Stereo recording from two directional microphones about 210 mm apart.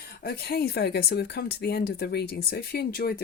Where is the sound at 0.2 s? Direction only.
45° left (ahead or behind).